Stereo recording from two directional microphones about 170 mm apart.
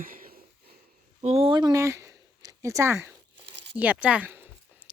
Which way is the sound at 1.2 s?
35° right (ahead or behind).